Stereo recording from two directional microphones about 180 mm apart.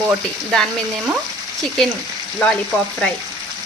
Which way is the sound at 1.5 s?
Centre (ahead or behind).